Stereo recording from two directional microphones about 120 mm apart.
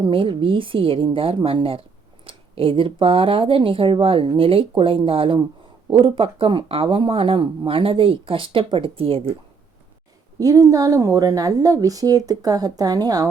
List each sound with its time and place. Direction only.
0.0 s speech: 45° right (ahead or behind)
10.3 s a woman's voice: 30° right (ahead or behind)